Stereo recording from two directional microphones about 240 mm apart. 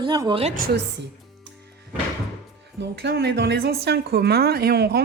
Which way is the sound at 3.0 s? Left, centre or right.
Right.